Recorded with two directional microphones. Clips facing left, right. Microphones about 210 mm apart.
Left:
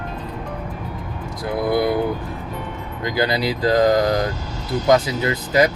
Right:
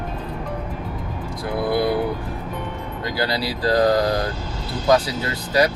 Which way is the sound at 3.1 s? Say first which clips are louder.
Left 4 dB; 20° left (ahead or behind).